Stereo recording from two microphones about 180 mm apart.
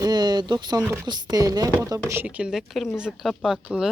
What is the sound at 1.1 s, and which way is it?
Speech, 25° right (ahead or behind).